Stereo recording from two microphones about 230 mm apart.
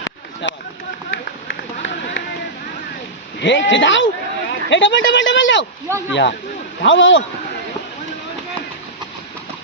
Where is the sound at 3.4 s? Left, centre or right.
Left.